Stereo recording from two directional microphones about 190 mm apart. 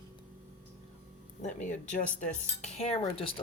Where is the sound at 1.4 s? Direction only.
40° left (ahead or behind).